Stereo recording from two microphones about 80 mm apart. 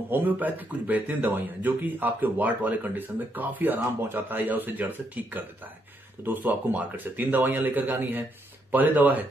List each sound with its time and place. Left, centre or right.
0.1 s speech: right